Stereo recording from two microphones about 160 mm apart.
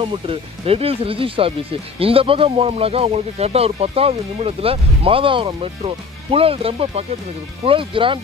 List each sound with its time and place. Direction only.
0.0 s speech: 35° right (ahead or behind)